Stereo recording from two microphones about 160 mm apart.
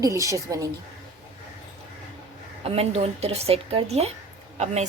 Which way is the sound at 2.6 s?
40° right (ahead or behind).